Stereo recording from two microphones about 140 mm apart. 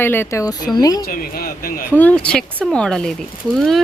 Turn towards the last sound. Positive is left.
turn(degrees=5)  # may be behind; listen again after turning